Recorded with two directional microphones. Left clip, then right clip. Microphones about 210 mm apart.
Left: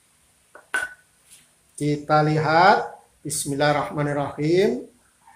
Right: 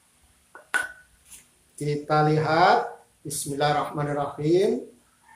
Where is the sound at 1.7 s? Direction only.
35° left (ahead or behind).